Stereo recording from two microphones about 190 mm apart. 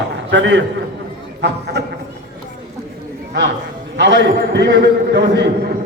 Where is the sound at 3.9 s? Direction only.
65° right (ahead or behind).